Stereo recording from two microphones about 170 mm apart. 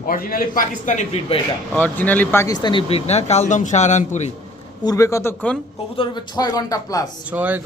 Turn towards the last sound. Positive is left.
turn(degrees=-10)  # may be behind; listen again after turning